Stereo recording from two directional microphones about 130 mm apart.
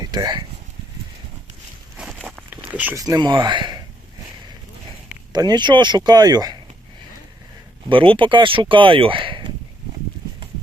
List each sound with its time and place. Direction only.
0.0 s speech: 30° right (ahead or behind)
2.5 s a sound: 10° right (ahead or behind)
2.9 s speech: 25° right (ahead or behind)
5.3 s speech: 35° right (ahead or behind)
7.9 s speech: 40° right (ahead or behind)